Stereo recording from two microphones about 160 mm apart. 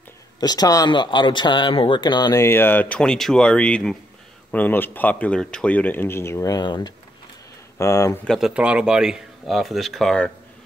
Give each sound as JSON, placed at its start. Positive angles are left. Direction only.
{"t": 0.4, "sound": "speech", "side_deg": 25}
{"t": 8.3, "sound": "speech", "side_deg": 0}